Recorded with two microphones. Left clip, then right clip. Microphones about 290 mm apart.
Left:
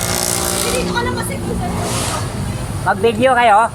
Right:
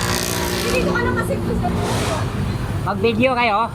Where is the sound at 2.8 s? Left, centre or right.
Left.